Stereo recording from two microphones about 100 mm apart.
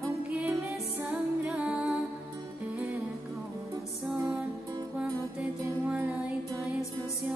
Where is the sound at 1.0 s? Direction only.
10° right (ahead or behind).